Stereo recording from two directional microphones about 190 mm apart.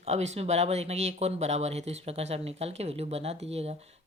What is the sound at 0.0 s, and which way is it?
A woman's voice, 35° right (ahead or behind).